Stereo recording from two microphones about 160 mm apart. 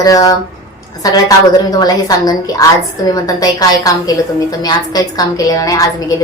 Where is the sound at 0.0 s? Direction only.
25° left (ahead or behind).